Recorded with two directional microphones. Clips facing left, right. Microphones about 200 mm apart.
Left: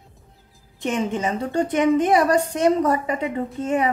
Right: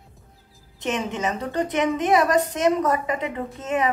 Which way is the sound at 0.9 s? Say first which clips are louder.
Left 3 dB; 30° left (ahead or behind).